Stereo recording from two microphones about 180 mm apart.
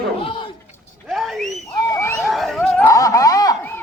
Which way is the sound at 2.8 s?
20° left (ahead or behind).